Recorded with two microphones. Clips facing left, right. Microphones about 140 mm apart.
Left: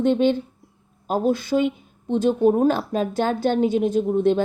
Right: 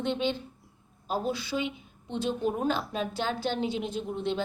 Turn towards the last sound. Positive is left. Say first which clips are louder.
# left 12 dB
turn(degrees=50)  # may be behind; listen again after turning